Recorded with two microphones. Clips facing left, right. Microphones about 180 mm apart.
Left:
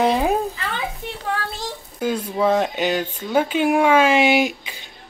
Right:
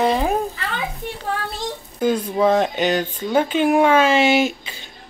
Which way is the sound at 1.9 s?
5° left (ahead or behind).